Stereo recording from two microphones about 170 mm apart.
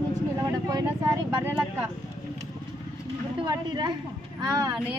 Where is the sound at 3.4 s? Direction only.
25° right (ahead or behind).